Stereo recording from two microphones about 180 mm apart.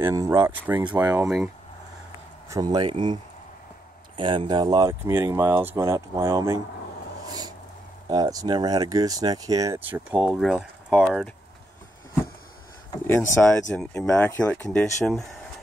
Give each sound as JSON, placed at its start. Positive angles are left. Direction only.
{"t": 0.0, "sound": "speech", "side_deg": -15}
{"t": 2.5, "sound": "speech", "side_deg": -20}
{"t": 4.2, "sound": "speech", "side_deg": -25}
{"t": 7.2, "sound": "a sound", "side_deg": -20}
{"t": 8.1, "sound": "speech", "side_deg": -20}
{"t": 12.9, "sound": "speech", "side_deg": 15}